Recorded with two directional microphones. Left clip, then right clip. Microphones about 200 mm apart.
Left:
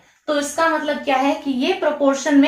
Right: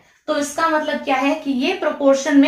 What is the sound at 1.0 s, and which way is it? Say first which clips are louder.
A woman's voice: even; 15° right (ahead or behind).